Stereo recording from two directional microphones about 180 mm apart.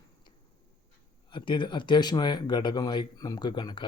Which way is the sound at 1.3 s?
25° left (ahead or behind).